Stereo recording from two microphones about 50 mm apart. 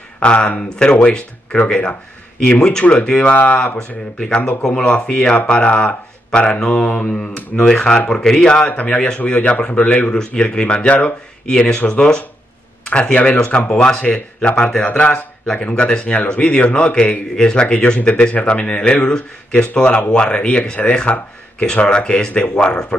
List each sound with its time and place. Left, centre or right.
0.2 s a man's voice: left
3.7 s speech: centre
4.4 s speech: left
4.6 s a man's voice: centre
7.5 s speech: centre
8.6 s a man's voice: left
11.5 s a man's voice: centre
14.8 s a man's voice: left